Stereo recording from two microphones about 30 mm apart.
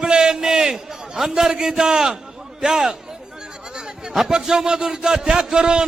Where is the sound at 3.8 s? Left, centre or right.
Right.